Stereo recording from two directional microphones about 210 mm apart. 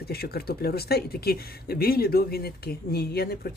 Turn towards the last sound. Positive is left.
turn(degrees=50)  # may be behind; listen again after turning